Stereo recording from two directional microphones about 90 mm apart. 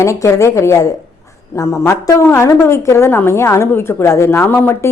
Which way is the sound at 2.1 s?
30° left (ahead or behind).